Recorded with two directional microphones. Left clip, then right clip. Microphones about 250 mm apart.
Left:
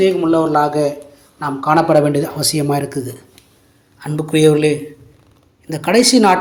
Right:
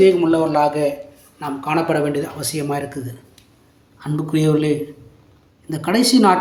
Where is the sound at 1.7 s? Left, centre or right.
Centre.